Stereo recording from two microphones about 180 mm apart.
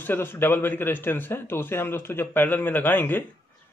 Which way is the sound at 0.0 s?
10° left (ahead or behind).